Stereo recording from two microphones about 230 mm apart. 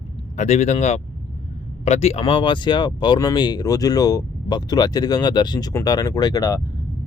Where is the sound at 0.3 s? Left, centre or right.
Left.